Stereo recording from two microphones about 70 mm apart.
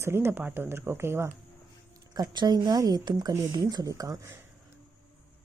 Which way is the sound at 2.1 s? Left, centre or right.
Right.